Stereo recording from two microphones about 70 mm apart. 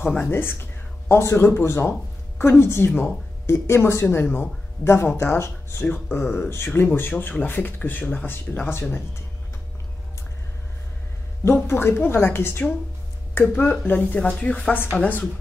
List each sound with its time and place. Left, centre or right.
0.2 s a woman's voice: left
11.6 s a woman's voice: left
13.6 s speech: left